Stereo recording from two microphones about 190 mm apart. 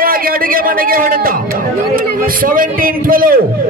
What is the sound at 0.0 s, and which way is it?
A man's voice, 50° right (ahead or behind).